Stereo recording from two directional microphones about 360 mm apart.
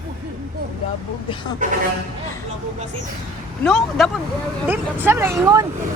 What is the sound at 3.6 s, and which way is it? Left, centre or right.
Speech, centre.